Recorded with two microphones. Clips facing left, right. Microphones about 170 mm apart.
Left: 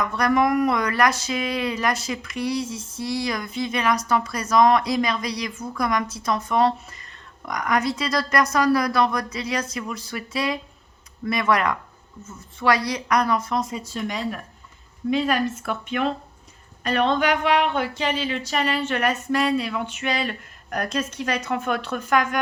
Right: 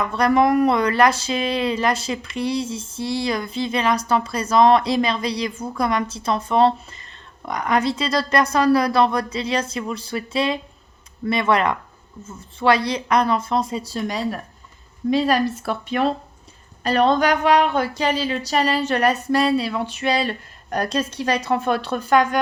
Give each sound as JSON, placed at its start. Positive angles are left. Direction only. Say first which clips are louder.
{"t": 0.0, "sound": "speech", "louder": "right 3 dB", "side_deg": -30}